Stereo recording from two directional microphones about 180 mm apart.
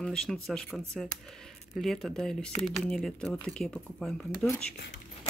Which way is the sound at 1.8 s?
Centre (ahead or behind).